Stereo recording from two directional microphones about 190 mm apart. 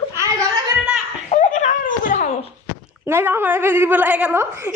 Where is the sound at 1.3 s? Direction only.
40° left (ahead or behind).